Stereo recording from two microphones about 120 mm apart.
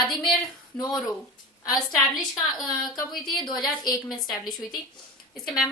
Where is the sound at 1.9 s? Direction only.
Centre (ahead or behind).